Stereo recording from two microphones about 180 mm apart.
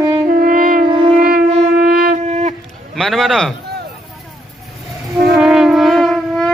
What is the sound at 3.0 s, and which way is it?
Speech, centre (ahead or behind).